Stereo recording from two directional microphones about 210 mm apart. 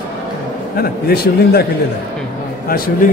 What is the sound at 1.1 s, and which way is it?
Speech, 50° left (ahead or behind).